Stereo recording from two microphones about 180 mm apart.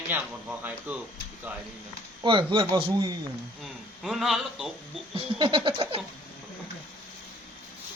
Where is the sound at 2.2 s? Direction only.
25° right (ahead or behind).